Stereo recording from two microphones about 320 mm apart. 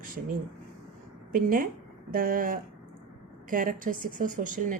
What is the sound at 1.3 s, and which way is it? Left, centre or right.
A woman's voice, right.